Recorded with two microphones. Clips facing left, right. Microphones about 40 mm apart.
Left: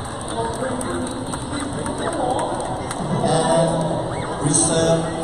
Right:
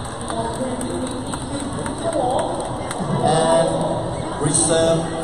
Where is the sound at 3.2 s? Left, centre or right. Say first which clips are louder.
Right 2 dB; centre.